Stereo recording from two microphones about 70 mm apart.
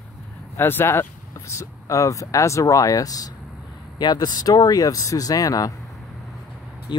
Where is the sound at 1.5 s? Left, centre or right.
Left.